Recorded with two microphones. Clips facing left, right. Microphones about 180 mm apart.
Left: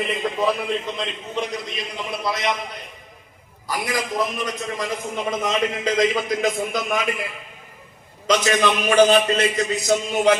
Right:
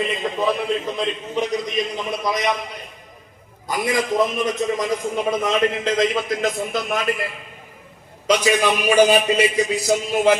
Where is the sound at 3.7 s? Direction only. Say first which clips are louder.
Right 4 dB; 25° right (ahead or behind).